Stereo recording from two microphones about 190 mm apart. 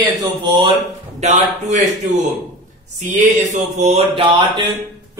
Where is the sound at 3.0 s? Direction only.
40° right (ahead or behind); by 4.6 s 25° right (ahead or behind).